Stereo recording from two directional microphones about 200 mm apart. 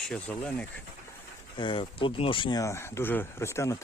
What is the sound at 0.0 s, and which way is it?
Speech, 5° left (ahead or behind).